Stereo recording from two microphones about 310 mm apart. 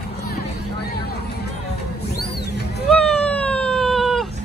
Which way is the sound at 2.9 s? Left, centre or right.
Centre.